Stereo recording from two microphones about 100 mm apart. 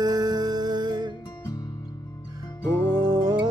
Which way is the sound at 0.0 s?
45° right (ahead or behind).